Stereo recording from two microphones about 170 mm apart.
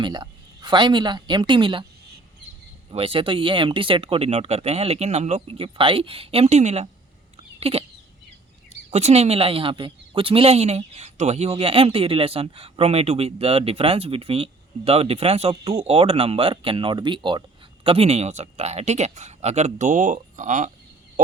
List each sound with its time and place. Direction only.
0.0 s a woman's voice: 25° right (ahead or behind)
2.9 s a woman's voice: 35° right (ahead or behind)
7.6 s chicken: 35° right (ahead or behind)
8.9 s a woman's voice: 40° right (ahead or behind)